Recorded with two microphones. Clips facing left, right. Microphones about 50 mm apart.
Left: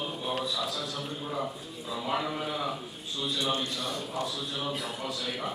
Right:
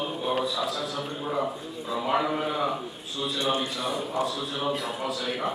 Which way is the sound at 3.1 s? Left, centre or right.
Centre.